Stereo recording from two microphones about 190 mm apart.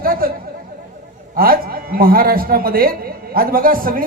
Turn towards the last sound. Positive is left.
turn(degrees=-50)  # may be behind; listen again after turning